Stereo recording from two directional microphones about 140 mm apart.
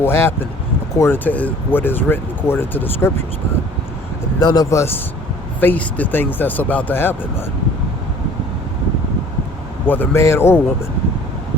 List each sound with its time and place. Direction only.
0.0 s speech: 15° left (ahead or behind)
4.4 s speech: 25° left (ahead or behind)
9.8 s speech: 15° left (ahead or behind)